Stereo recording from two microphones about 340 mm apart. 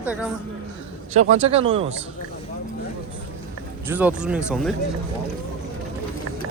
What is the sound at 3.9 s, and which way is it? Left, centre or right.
Speech, centre.